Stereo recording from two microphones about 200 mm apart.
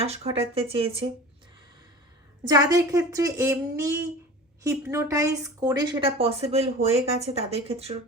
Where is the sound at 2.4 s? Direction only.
20° right (ahead or behind).